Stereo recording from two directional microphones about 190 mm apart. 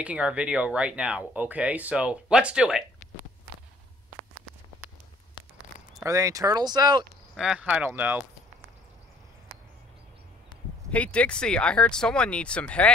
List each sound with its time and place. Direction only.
0.0 s speech: 5° right (ahead or behind)
6.0 s speech: 15° right (ahead or behind)
7.3 s speech: 5° right (ahead or behind)
10.9 s speech: 5° left (ahead or behind)